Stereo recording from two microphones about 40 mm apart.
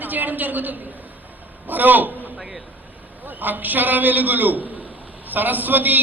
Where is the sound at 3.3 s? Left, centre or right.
Right.